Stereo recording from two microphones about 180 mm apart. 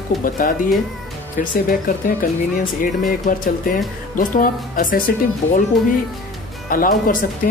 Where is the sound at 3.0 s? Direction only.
50° left (ahead or behind).